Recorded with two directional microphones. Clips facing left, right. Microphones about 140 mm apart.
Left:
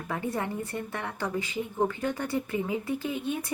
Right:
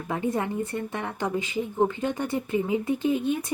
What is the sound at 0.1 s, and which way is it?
Speech, 20° right (ahead or behind).